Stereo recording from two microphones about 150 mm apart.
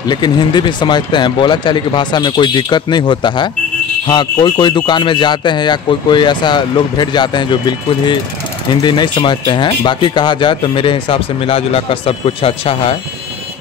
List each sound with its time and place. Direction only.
0.0 s speech: 30° left (ahead or behind)